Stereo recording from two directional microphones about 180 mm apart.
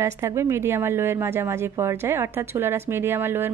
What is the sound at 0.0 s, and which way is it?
A woman's voice, 15° right (ahead or behind).